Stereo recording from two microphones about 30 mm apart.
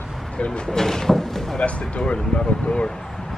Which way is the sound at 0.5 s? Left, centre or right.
Left.